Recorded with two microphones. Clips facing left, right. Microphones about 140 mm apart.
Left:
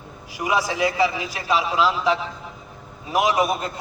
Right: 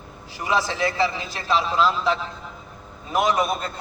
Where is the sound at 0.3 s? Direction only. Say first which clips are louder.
Left 1 dB; 15° left (ahead or behind).